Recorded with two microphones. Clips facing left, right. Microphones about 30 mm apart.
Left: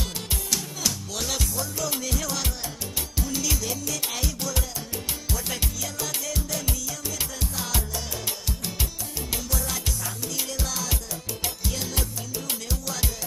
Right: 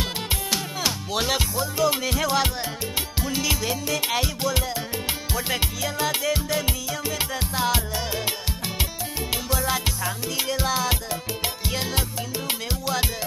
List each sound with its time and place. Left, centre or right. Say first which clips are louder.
0.0 s music: right 5 dB; right